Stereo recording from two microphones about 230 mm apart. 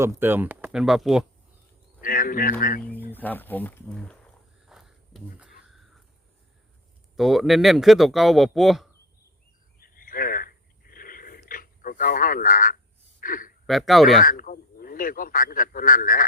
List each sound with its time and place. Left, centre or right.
0.0 s speech: centre
2.0 s speech: left
3.1 s speech: centre
4.6 s a sound: centre
7.2 s speech: centre
9.8 s a sound: left
13.7 s speech: centre
14.3 s speech: left